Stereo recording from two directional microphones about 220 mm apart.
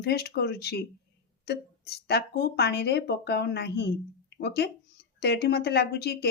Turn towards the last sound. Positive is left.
turn(degrees=45)  # may be behind; listen again after turning